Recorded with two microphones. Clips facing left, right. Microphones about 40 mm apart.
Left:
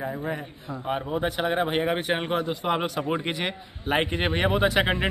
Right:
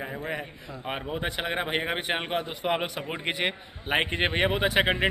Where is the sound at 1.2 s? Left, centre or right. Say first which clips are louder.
Left 4 dB; right.